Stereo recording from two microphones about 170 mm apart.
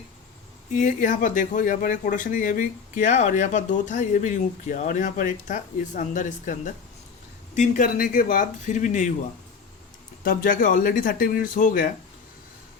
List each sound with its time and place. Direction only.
0.7 s speech: 50° left (ahead or behind)
10.2 s speech: 55° left (ahead or behind)